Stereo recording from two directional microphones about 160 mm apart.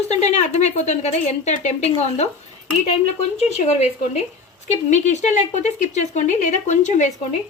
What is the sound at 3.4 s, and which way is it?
Speech, 40° left (ahead or behind).